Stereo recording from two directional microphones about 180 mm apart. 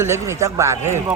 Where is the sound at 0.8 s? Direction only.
40° right (ahead or behind).